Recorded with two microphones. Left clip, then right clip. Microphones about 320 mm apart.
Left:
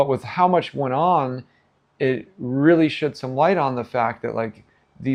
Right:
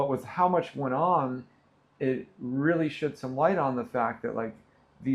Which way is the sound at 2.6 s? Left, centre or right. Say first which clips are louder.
Left 10 dB; left.